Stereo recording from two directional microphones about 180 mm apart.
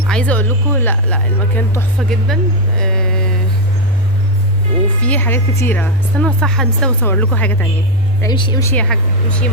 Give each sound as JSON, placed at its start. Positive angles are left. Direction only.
{"t": 0.1, "sound": "speech", "side_deg": 5}
{"t": 5.0, "sound": "speech", "side_deg": 10}
{"t": 8.2, "sound": "speech", "side_deg": 25}
{"t": 8.6, "sound": "speech", "side_deg": 5}